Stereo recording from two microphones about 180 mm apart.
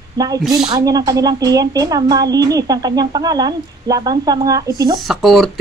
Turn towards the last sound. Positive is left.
turn(degrees=0)  # may be behind; listen again after turning